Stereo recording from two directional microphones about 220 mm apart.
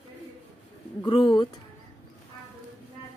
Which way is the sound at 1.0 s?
20° left (ahead or behind).